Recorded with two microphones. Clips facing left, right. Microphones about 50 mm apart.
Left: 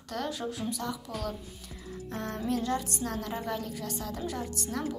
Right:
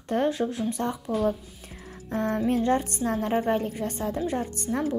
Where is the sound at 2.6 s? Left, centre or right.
Right.